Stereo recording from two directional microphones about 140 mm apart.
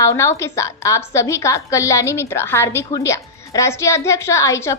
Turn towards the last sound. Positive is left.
turn(degrees=20)  # may be behind; listen again after turning